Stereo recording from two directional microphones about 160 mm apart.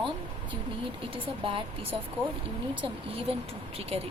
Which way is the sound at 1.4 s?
35° right (ahead or behind).